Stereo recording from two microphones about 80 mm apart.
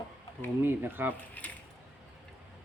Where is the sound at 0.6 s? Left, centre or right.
Right.